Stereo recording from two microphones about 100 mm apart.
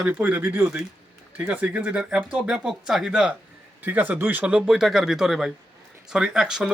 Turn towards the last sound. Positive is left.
turn(degrees=-5)  # may be behind; listen again after turning